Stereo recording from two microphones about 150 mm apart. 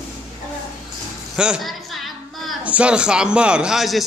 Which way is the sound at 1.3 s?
5° right (ahead or behind).